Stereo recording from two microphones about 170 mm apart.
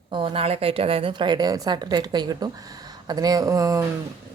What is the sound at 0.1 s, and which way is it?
A woman's voice, 30° right (ahead or behind).